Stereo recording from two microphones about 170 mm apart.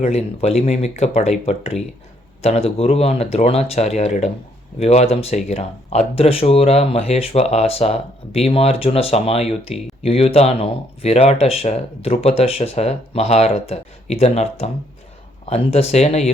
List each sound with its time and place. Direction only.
0.0 s speech: 40° left (ahead or behind)